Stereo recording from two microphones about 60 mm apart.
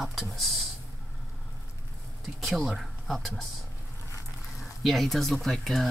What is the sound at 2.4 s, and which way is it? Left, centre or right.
Speech, centre.